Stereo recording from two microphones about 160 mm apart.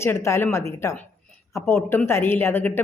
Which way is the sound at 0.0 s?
15° left (ahead or behind).